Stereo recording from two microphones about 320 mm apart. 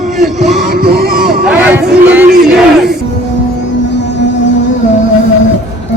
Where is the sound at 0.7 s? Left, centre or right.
Right.